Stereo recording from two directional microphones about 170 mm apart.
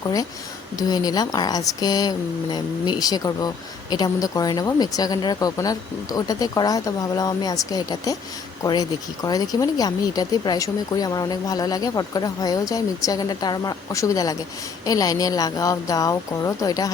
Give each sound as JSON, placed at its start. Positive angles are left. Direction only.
{"t": 0.0, "sound": "speech", "side_deg": 20}